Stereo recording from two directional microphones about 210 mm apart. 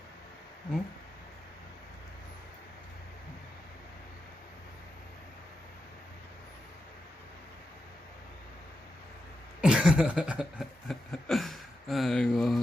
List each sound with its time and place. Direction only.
9.6 s chuckle: 5° right (ahead or behind)